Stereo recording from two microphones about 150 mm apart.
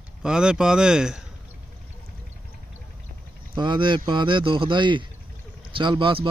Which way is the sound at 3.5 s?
30° right (ahead or behind).